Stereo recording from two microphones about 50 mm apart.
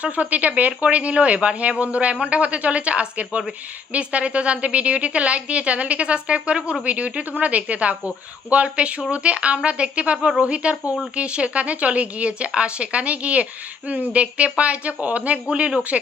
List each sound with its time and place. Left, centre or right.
0.0 s speech: right